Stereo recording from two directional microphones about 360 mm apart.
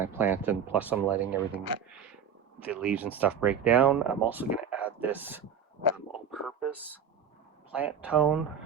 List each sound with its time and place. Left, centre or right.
0.0 s speech: centre
6.3 s a sound: centre
7.7 s speech: centre